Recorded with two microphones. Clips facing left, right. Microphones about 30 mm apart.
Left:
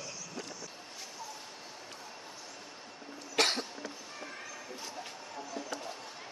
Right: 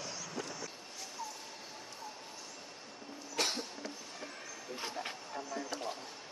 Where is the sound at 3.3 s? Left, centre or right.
Left.